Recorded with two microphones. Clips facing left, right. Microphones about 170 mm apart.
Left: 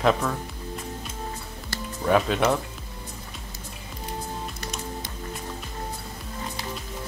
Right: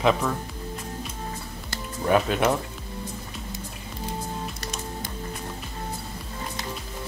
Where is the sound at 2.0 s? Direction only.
Centre (ahead or behind).